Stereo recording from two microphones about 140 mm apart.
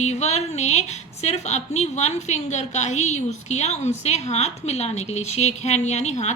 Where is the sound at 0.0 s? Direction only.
55° left (ahead or behind).